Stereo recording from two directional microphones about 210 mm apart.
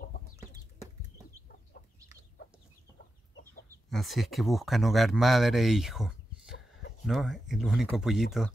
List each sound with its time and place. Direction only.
1.5 s chicken: 45° left (ahead or behind)
3.9 s speech: centre (ahead or behind)